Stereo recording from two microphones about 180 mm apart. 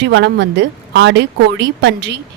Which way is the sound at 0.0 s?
75° right (ahead or behind).